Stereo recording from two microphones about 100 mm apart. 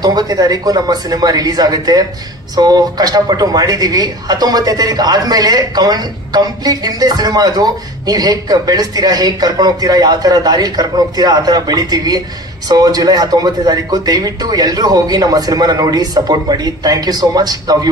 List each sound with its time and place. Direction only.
0.0 s speech: 40° right (ahead or behind)